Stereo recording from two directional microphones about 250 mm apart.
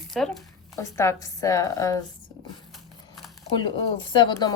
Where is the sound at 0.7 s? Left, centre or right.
Centre.